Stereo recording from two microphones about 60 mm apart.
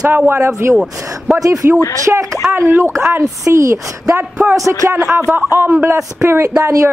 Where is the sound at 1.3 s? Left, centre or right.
Centre.